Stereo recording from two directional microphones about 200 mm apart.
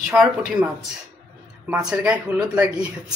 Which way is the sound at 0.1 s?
5° right (ahead or behind).